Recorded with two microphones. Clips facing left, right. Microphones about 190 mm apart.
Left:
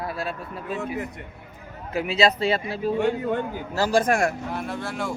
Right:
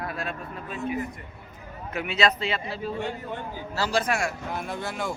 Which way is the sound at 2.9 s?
50° left (ahead or behind).